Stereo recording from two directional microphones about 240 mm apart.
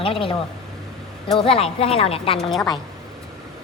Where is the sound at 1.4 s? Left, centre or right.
Left.